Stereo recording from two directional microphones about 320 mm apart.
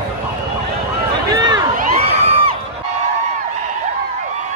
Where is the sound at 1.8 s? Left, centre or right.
Centre.